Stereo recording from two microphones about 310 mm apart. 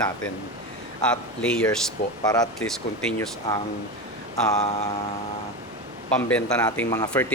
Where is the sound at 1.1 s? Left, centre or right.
Centre.